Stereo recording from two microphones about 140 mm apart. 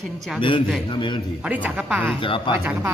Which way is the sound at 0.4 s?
35° left (ahead or behind).